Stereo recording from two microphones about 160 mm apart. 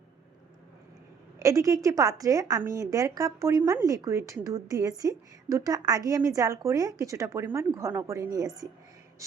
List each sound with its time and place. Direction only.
1.4 s speech: 20° right (ahead or behind)